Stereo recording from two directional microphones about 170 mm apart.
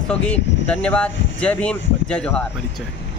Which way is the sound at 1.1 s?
90° left.